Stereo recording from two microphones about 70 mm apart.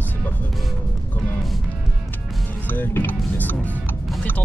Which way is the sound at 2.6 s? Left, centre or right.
Left.